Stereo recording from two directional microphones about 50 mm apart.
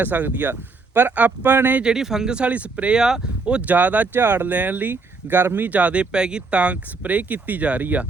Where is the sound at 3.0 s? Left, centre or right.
Centre.